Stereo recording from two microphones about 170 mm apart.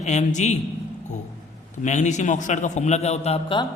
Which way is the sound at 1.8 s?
45° left (ahead or behind).